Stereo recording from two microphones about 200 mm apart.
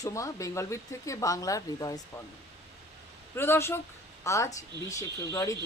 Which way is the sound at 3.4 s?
10° left (ahead or behind).